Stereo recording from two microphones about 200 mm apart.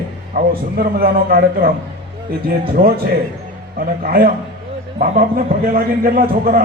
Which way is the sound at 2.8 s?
45° right (ahead or behind).